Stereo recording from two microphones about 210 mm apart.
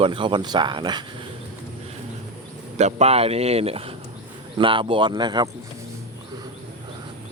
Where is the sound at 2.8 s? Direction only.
30° right (ahead or behind).